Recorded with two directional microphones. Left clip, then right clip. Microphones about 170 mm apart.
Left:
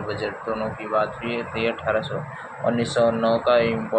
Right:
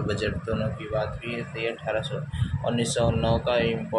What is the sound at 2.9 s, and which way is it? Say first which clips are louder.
Speech: left 6 dB; 10° right (ahead or behind).